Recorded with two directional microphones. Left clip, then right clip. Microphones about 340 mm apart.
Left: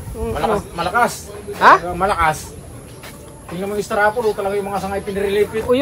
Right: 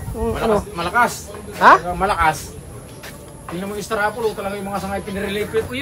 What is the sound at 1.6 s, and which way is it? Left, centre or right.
Speech, centre.